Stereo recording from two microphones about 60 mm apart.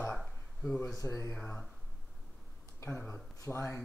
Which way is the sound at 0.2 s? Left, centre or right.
Centre.